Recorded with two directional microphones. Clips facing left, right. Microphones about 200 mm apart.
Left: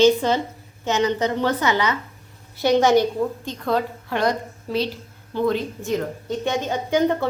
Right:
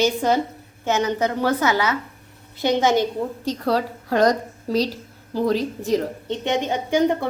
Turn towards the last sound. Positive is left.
turn(degrees=-15)  # may be behind; listen again after turning